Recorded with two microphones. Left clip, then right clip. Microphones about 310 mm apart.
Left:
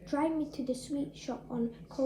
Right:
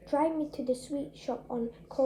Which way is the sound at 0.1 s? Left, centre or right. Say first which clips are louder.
Right 3 dB; right.